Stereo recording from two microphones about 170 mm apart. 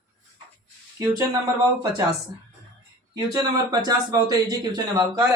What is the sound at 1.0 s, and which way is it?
Speech, 20° right (ahead or behind).